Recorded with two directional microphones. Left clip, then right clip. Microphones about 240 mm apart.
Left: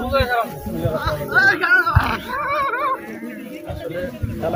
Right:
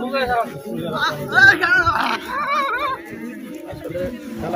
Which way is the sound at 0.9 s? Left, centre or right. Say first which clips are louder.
Right 2 dB; right.